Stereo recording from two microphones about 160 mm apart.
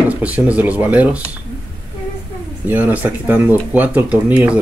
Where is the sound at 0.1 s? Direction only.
10° right (ahead or behind).